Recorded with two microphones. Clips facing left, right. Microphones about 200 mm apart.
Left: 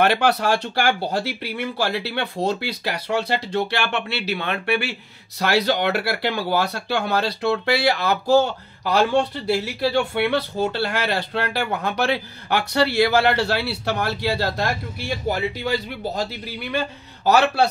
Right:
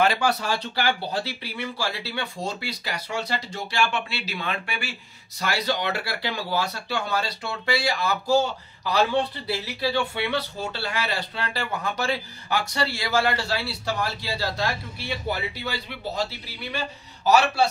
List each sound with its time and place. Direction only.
0.0 s speech: 65° left (ahead or behind)
15.0 s speech: 45° left (ahead or behind)
16.7 s speech: 60° left (ahead or behind)